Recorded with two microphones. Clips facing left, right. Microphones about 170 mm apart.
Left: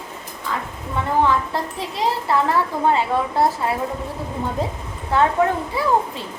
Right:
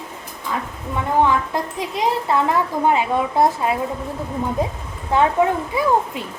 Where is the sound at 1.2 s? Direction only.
15° right (ahead or behind).